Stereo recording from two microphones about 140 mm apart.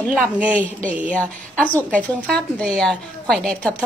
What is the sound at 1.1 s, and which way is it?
A woman's voice, 10° left (ahead or behind).